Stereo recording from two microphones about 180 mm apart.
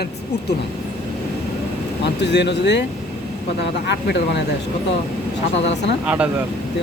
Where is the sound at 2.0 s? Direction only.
75° left (ahead or behind).